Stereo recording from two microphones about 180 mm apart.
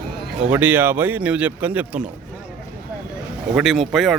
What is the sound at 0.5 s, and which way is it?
Speech, 10° right (ahead or behind).